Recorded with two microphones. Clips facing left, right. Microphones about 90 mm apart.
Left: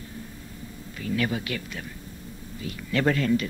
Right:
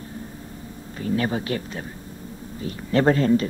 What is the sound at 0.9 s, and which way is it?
Speech, 35° right (ahead or behind).